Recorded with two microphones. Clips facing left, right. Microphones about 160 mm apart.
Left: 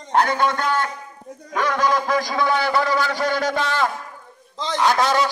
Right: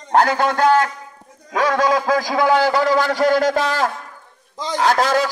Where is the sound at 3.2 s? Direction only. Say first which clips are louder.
Right 5 dB; 45° right (ahead or behind).